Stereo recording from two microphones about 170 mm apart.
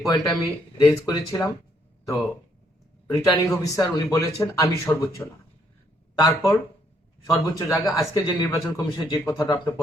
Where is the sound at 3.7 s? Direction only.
20° left (ahead or behind).